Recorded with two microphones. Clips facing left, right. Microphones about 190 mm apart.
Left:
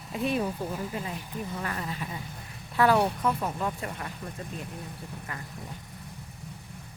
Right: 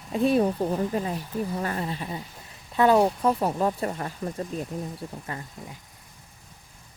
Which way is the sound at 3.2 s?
35° right (ahead or behind).